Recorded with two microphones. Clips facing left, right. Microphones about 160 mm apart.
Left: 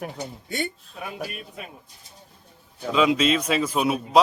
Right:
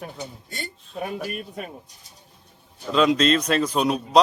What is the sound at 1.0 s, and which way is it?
Speech, 45° right (ahead or behind).